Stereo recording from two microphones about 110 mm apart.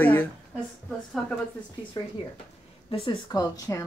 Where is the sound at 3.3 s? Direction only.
35° left (ahead or behind).